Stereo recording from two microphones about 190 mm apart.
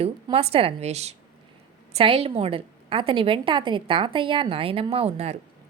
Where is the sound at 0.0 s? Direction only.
30° right (ahead or behind).